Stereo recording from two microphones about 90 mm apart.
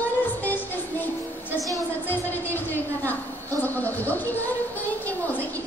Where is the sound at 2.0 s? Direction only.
20° left (ahead or behind).